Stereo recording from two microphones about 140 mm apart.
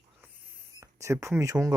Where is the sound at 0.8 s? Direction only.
20° right (ahead or behind).